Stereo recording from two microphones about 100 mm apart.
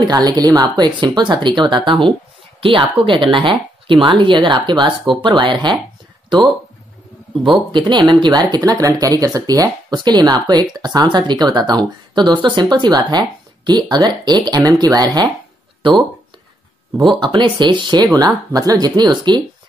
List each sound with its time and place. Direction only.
0.0 s speech: 45° right (ahead or behind)
7.7 s speech: 50° right (ahead or behind)
17.2 s speech: 50° right (ahead or behind)
18.1 s speech: 40° right (ahead or behind)